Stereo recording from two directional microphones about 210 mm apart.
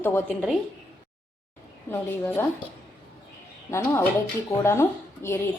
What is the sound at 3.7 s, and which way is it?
A woman's voice, 15° left (ahead or behind).